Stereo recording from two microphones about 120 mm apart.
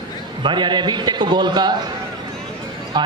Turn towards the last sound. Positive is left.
turn(degrees=-35)  # may be behind; listen again after turning